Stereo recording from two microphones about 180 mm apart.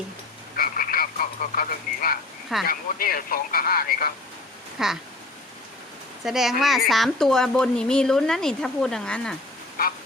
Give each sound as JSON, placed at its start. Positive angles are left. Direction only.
{"t": 0.5, "sound": "a sound", "side_deg": 55}
{"t": 2.6, "sound": "speech", "side_deg": 55}
{"t": 4.8, "sound": "a woman's voice", "side_deg": 0}
{"t": 6.2, "sound": "a woman's voice", "side_deg": 0}